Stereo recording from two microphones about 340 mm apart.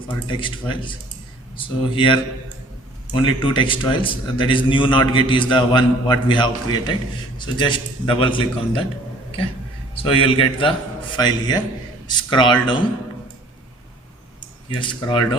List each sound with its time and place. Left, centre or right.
0.3 s a man's voice: centre
9.9 s a man's voice: centre
14.8 s a man's voice: centre